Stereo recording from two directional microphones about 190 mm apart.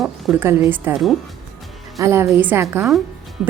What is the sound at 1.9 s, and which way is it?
Speech, 15° right (ahead or behind).